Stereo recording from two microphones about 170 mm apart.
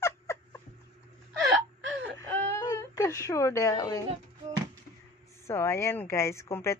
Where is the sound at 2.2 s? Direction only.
20° left (ahead or behind).